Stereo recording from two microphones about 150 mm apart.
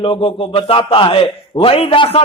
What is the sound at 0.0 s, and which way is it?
A man's voice, 35° left (ahead or behind).